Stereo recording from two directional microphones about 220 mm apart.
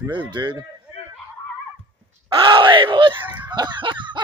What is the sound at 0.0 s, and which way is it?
Speech, 15° right (ahead or behind).